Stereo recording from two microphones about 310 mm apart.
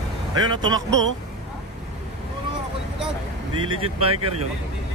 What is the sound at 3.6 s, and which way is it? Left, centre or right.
Speech, right.